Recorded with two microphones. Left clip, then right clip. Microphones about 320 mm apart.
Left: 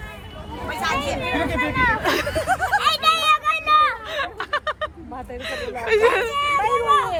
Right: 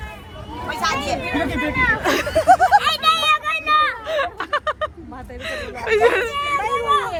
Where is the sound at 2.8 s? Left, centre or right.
Centre.